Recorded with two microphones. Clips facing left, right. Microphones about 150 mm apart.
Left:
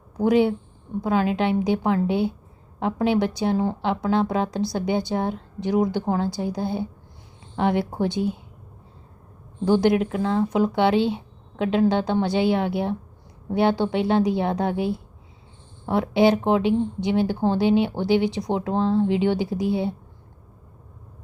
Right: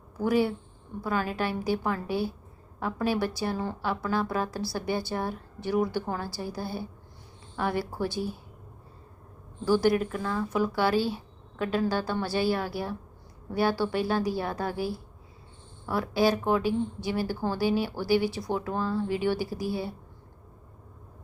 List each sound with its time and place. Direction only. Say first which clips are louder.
0.2 s a woman's voice: left 6 dB; 20° left (ahead or behind)
9.6 s a woman's voice: left 4 dB; 20° left (ahead or behind)